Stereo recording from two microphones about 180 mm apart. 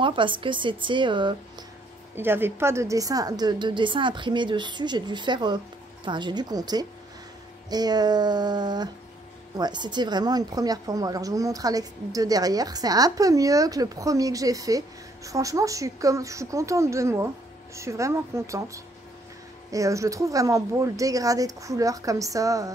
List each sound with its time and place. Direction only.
0.0 s a woman's voice: 25° right (ahead or behind)
2.1 s a woman's voice: 10° right (ahead or behind)